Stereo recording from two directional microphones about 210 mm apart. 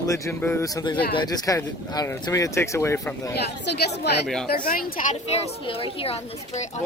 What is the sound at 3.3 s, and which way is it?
Speech, 50° left (ahead or behind).